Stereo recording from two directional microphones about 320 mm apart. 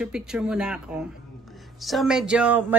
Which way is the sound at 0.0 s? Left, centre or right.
Centre.